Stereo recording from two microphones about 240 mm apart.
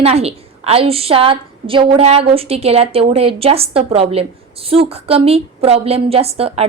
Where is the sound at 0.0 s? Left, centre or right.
Right.